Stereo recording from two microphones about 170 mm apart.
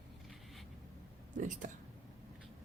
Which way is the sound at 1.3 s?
50° right (ahead or behind).